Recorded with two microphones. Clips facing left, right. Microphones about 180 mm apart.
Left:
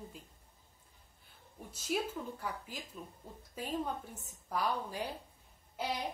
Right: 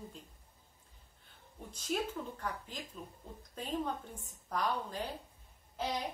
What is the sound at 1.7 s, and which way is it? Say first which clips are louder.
Speech: even; 5° left (ahead or behind).